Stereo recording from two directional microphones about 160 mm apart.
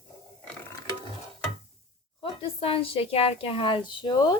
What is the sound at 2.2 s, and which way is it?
A woman's voice, 35° left (ahead or behind).